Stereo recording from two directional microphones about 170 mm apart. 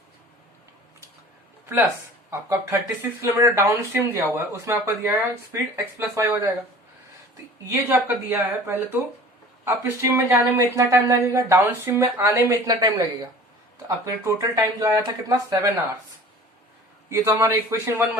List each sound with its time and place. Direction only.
2.3 s speech: 15° right (ahead or behind)
7.7 s speech: 10° right (ahead or behind)
17.1 s speech: 15° right (ahead or behind)